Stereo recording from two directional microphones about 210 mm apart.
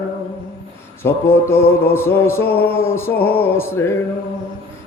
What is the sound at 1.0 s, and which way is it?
Music, 10° left (ahead or behind).